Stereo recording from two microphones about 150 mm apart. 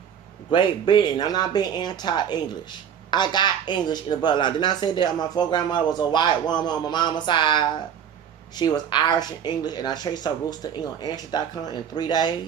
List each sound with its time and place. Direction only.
0.5 s speech: 30° left (ahead or behind)